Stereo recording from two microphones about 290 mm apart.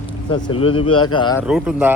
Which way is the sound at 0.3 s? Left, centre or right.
Centre.